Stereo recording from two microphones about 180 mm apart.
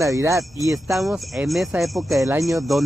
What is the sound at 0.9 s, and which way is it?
Speech, centre (ahead or behind).